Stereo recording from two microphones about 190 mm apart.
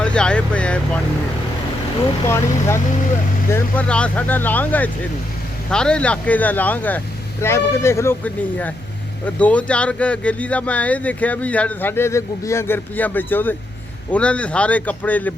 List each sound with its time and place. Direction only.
0.0 s vehicle: 5° left (ahead or behind)
2.2 s speech: 15° left (ahead or behind)